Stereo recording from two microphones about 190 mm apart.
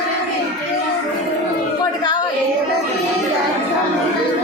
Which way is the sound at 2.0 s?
20° left (ahead or behind).